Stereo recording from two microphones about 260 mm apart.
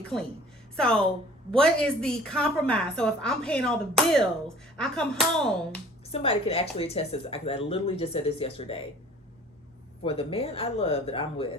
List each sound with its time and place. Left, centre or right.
0.8 s a woman's voice: centre
6.1 s speech: left
10.0 s speech: left